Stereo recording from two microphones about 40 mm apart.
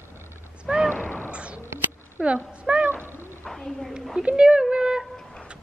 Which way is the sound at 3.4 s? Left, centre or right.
Centre.